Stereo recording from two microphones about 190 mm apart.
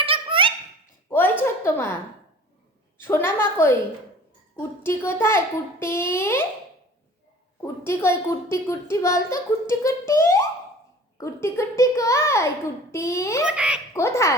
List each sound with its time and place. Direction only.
0.0 s a sound: 30° right (ahead or behind)
1.1 s a sound: 10° left (ahead or behind)
3.0 s a child's voice: 10° left (ahead or behind)
7.6 s a child's voice: 15° left (ahead or behind)
13.4 s a child's voice: 5° right (ahead or behind)
13.9 s a child's voice: 15° left (ahead or behind)